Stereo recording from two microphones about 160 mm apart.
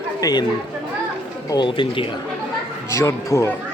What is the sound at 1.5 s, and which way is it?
Speech, 30° left (ahead or behind).